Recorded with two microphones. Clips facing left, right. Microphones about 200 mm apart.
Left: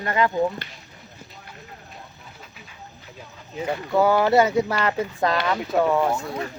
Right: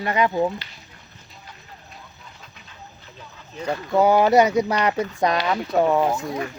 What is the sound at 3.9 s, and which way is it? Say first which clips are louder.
Speech: right 2 dB; 20° right (ahead or behind).